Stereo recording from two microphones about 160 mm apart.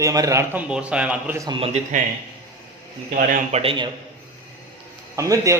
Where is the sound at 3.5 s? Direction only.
35° right (ahead or behind).